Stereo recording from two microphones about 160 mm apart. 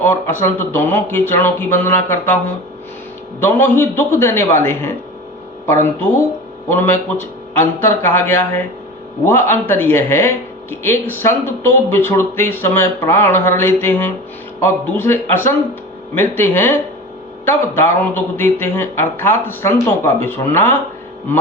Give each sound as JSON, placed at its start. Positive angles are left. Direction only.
{"t": 0.0, "sound": "speech", "side_deg": 15}
{"t": 3.4, "sound": "speech", "side_deg": 15}